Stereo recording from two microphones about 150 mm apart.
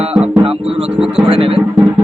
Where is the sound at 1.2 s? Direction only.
40° right (ahead or behind).